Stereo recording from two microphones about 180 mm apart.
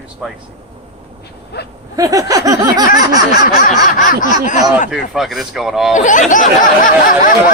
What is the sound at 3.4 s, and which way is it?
Snicker, 45° left (ahead or behind).